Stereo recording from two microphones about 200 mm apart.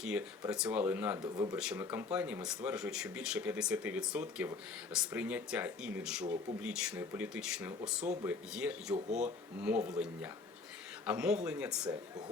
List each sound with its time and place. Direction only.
0.0 s speech: 5° right (ahead or behind)
9.0 s speech: 35° right (ahead or behind)
9.6 s speech: 5° right (ahead or behind)
11.0 s speech: 5° right (ahead or behind)